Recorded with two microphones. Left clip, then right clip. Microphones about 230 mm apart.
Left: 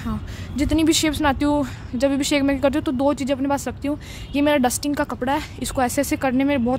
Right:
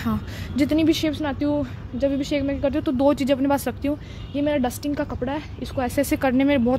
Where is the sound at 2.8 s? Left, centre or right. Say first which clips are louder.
Right 1 dB; centre.